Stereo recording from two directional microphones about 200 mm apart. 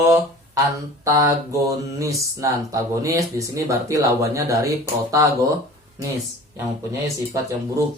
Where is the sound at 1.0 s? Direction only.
15° right (ahead or behind).